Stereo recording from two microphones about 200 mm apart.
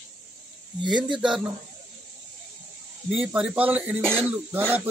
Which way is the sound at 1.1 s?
5° right (ahead or behind).